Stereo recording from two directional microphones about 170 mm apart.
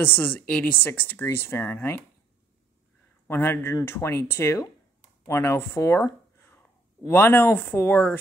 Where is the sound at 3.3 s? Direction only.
10° left (ahead or behind).